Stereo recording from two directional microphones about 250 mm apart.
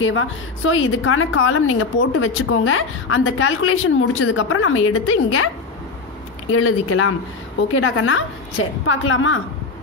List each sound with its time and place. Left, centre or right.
0.0 s a woman's voice: left
6.6 s a woman's voice: left